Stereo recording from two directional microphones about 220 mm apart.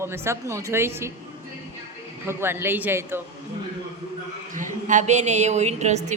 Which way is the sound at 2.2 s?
10° right (ahead or behind).